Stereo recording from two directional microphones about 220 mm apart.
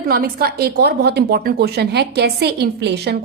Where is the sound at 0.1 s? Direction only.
45° right (ahead or behind).